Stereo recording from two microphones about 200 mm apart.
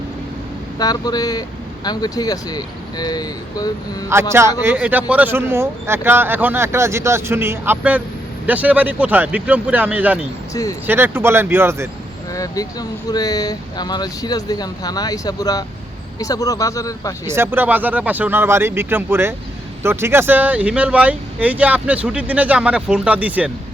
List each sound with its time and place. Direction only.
0.8 s speech: 20° left (ahead or behind)
4.1 s speech: 10° right (ahead or behind)
10.5 s speech: 15° left (ahead or behind)
10.8 s speech: 10° right (ahead or behind)
12.3 s speech: 15° left (ahead or behind)
17.2 s speech: 10° right (ahead or behind)